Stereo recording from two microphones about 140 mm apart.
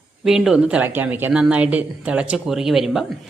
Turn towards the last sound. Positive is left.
turn(degrees=-5)  # may be behind; listen again after turning